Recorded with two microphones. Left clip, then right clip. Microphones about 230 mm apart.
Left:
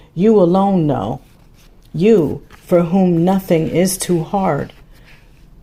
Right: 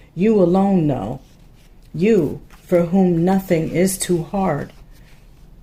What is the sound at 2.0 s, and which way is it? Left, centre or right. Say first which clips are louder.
Speech: left 4 dB; left.